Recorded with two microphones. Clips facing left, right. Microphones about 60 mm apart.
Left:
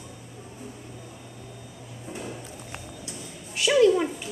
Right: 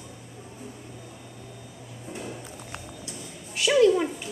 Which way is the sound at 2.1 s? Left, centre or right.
Centre.